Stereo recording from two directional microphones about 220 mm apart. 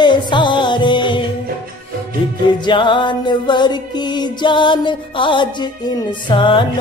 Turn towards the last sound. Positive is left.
turn(degrees=20)  # may be behind; listen again after turning